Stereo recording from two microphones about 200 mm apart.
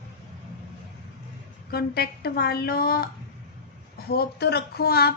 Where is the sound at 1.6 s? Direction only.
50° left (ahead or behind).